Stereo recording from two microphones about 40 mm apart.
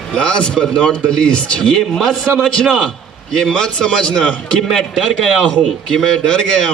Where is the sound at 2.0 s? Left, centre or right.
Centre; by 4.4 s left.